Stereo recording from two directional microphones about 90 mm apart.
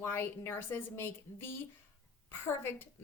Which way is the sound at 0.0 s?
25° left (ahead or behind).